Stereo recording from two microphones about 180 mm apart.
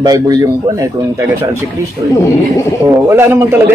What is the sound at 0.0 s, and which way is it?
Speech, 20° right (ahead or behind).